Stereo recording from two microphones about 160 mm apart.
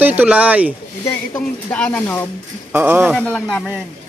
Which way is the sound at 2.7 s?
10° right (ahead or behind).